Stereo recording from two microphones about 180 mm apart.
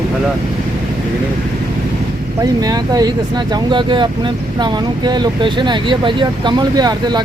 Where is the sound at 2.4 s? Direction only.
20° right (ahead or behind).